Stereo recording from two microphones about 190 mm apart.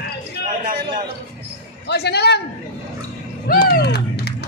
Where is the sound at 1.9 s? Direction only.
60° left (ahead or behind).